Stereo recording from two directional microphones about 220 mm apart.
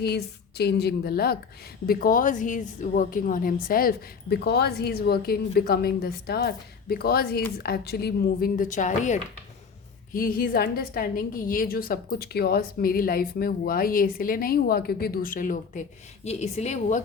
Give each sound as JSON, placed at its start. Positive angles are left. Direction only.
{"t": 0.0, "sound": "a woman's voice", "side_deg": 50}